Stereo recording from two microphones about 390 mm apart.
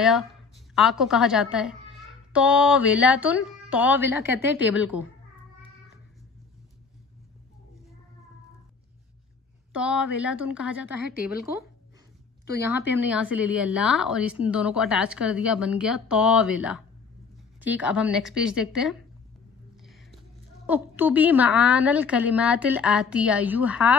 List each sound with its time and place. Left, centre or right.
0.0 s a woman's voice: centre
9.7 s a woman's voice: centre
12.6 s a woman's voice: centre
17.6 s a woman's voice: centre
20.6 s a woman's voice: centre